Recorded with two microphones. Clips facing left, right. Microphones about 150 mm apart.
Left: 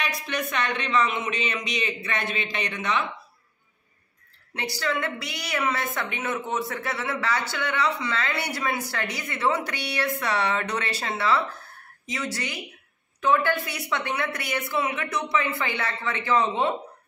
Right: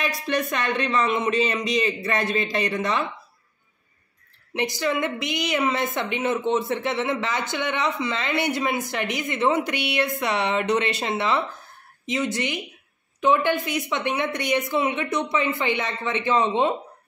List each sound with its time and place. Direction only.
0.4 s a man's voice: 40° right (ahead or behind)
4.6 s a woman's voice: 15° right (ahead or behind)